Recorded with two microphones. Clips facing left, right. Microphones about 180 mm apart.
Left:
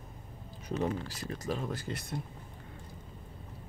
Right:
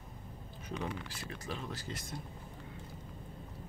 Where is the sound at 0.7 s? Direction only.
40° left (ahead or behind); by 2.1 s 60° left (ahead or behind).